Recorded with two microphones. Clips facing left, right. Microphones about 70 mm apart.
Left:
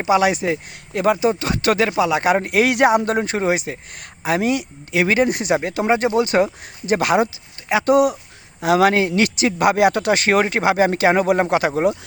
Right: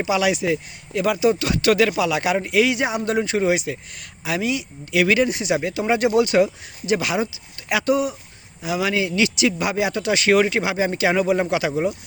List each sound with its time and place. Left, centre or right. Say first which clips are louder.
0.0 s speech: left 3 dB; left
5.3 s speech: left 2 dB; left
7.7 s speech: left 3 dB; left
8.6 s speech: left 9 dB; left
8.9 s speech: left 3 dB; left